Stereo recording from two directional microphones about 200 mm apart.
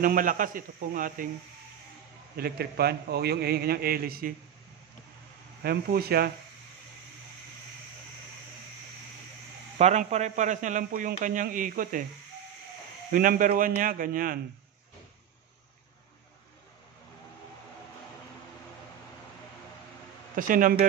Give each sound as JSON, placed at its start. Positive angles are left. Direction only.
{"t": 0.0, "sound": "a man's voice", "side_deg": -45}
{"t": 2.3, "sound": "a man's voice", "side_deg": -50}
{"t": 5.6, "sound": "a man's voice", "side_deg": -50}
{"t": 9.8, "sound": "a man's voice", "side_deg": -35}
{"t": 13.1, "sound": "a man's voice", "side_deg": -45}
{"t": 20.3, "sound": "a man's voice", "side_deg": -40}